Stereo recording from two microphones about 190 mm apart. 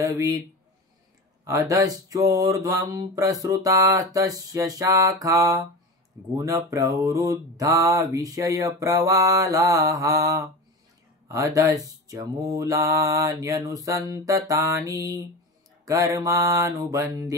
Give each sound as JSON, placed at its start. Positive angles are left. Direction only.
{"t": 0.0, "sound": "mantra", "side_deg": -15}
{"t": 1.4, "sound": "mantra", "side_deg": -15}